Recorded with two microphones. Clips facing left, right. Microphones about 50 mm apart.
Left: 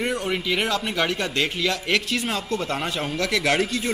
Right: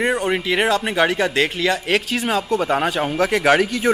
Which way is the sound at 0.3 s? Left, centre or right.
Centre.